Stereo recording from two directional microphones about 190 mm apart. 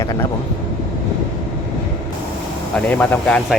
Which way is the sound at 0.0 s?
20° left (ahead or behind).